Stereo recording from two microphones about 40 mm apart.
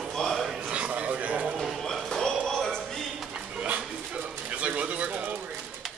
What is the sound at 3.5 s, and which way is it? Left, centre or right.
Pigeon, right.